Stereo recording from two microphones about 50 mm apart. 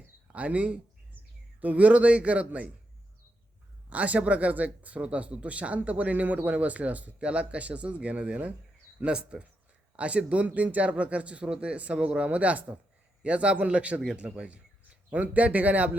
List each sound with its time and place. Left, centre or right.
0.3 s speech: right
3.8 s speech: right